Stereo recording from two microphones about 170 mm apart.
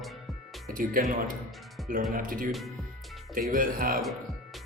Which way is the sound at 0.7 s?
55° right (ahead or behind).